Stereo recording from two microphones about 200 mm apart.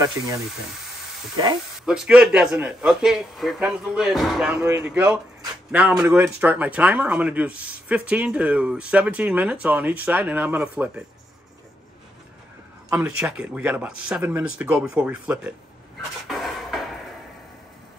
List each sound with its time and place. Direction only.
1.9 s a man's voice: 5° right (ahead or behind)
12.9 s speech: 10° right (ahead or behind)
16.3 s a sound: centre (ahead or behind)